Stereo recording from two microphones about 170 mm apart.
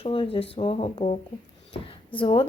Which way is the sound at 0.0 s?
35° left (ahead or behind).